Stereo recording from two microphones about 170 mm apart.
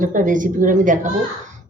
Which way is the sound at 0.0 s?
50° right (ahead or behind).